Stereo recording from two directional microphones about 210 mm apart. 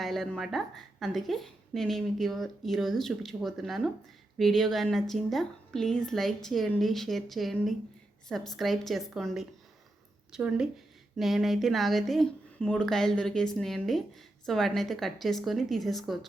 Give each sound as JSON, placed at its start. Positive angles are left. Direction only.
{"t": 0.0, "sound": "speech", "side_deg": 0}